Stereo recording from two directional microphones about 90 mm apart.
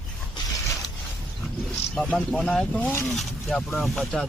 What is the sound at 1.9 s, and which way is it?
Speech, 10° left (ahead or behind).